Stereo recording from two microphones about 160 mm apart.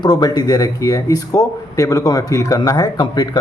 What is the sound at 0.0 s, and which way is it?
A man's voice, 25° left (ahead or behind).